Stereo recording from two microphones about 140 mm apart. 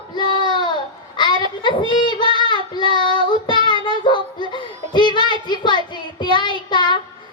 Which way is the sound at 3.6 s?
35° left (ahead or behind).